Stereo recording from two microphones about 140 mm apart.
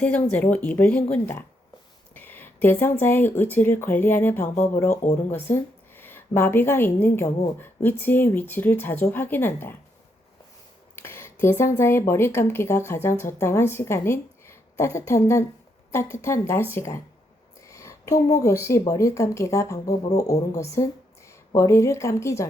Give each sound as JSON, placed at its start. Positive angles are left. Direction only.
{"t": 0.0, "sound": "speech", "side_deg": 10}
{"t": 2.1, "sound": "a sound", "side_deg": 15}
{"t": 3.0, "sound": "speech", "side_deg": 15}
{"t": 4.5, "sound": "speech", "side_deg": 55}
{"t": 4.8, "sound": "a woman's voice", "side_deg": 15}
{"t": 11.0, "sound": "a woman's voice", "side_deg": 15}
{"t": 17.7, "sound": "a sound", "side_deg": 20}
{"t": 18.3, "sound": "speech", "side_deg": 25}